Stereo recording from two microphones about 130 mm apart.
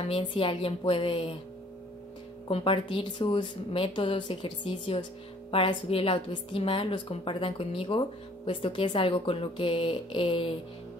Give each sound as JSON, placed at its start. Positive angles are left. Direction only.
{"t": 0.0, "sound": "a woman's voice", "side_deg": 45}
{"t": 2.4, "sound": "a woman's voice", "side_deg": 40}